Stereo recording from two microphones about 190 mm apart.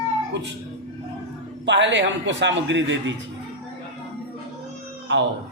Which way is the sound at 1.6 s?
70° right (ahead or behind).